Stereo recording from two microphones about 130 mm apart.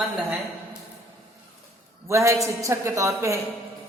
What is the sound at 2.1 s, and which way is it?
A woman's voice, 25° right (ahead or behind).